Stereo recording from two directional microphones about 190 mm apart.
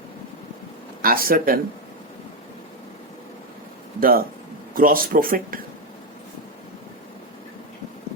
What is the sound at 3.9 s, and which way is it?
Speech, 50° right (ahead or behind).